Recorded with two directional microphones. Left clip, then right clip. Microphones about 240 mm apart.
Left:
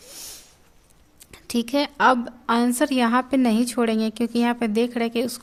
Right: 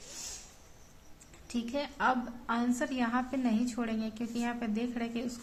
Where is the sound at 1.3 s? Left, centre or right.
Left.